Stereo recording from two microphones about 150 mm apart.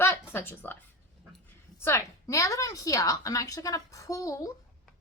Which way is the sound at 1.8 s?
20° left (ahead or behind).